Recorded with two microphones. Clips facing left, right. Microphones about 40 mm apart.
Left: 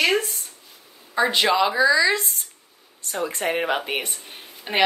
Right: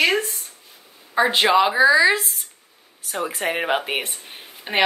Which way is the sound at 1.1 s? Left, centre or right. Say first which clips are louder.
Right 3 dB; right.